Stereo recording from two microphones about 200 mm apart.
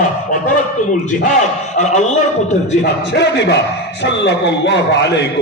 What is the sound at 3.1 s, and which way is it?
A man's voice, 60° left (ahead or behind).